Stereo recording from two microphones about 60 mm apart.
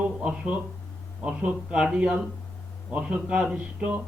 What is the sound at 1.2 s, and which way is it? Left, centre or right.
Speech, right.